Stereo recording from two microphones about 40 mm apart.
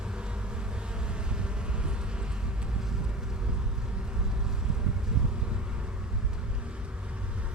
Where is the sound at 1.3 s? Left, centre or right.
Right.